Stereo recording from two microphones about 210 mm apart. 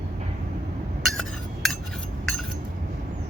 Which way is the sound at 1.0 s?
Centre (ahead or behind).